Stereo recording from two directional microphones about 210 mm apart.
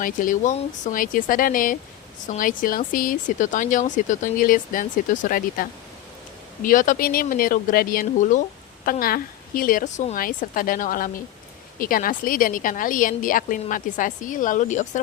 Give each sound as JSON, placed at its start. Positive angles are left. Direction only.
{"t": 0.0, "sound": "speech", "side_deg": 40}